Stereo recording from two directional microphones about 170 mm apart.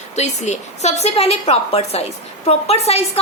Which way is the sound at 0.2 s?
40° left (ahead or behind).